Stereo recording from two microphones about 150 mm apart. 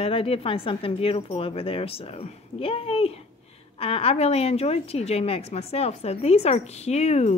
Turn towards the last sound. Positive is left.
turn(degrees=45)  # may be behind; listen again after turning